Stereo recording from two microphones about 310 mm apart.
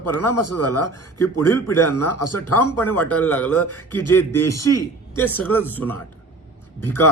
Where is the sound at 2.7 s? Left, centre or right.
Centre.